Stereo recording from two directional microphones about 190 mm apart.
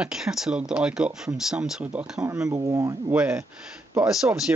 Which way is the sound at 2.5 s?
15° right (ahead or behind).